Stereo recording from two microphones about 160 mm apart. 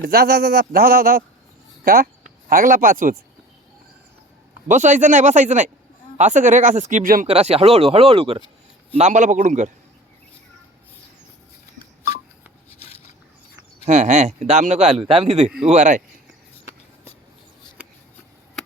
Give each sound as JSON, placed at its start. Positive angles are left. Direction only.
{"t": 0.0, "sound": "a man's voice", "side_deg": -70}
{"t": 4.7, "sound": "speech", "side_deg": -50}
{"t": 7.3, "sound": "speech", "side_deg": -40}
{"t": 9.0, "sound": "speech", "side_deg": -45}
{"t": 13.8, "sound": "speech", "side_deg": -45}